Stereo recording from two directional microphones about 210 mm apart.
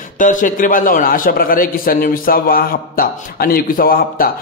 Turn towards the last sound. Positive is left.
turn(degrees=45)  # may be behind; listen again after turning